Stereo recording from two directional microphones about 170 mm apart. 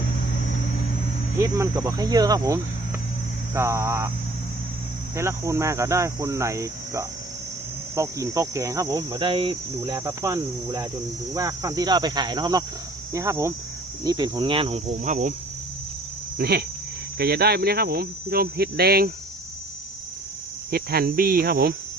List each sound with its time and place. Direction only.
1.4 s cricket: 15° right (ahead or behind)
3.5 s speech: 15° right (ahead or behind)
5.1 s speech: 15° right (ahead or behind)
7.9 s cricket: 20° right (ahead or behind)
9.8 s speech: 15° right (ahead or behind)
11.3 s cricket: 20° right (ahead or behind)
13.1 s speech: 15° right (ahead or behind)
14.0 s cricket: 25° right (ahead or behind)
15.0 s speech: 45° right (ahead or behind)
16.4 s speech: 70° right (ahead or behind)
20.7 s speech: 60° right (ahead or behind)